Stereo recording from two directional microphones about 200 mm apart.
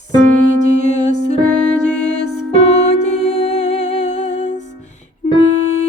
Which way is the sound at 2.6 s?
35° left (ahead or behind).